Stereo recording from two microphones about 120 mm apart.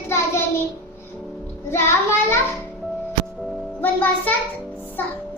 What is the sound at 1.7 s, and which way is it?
Child singing, 20° left (ahead or behind).